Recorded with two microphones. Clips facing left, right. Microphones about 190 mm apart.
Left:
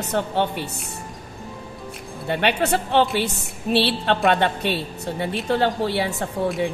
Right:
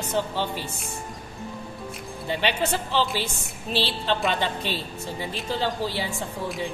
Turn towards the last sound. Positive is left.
turn(degrees=65)  # may be behind; listen again after turning